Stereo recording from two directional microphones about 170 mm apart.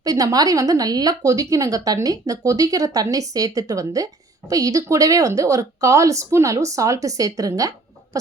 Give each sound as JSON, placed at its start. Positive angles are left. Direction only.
{"t": 0.0, "sound": "a woman's voice", "side_deg": -20}